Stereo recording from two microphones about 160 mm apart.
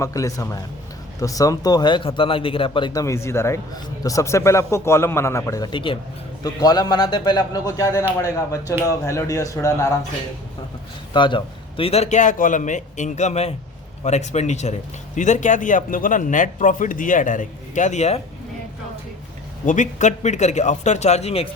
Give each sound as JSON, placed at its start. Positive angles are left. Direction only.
{"t": 0.0, "sound": "a man's voice", "side_deg": 20}
{"t": 11.1, "sound": "a man's voice", "side_deg": 30}
{"t": 19.6, "sound": "a man's voice", "side_deg": 50}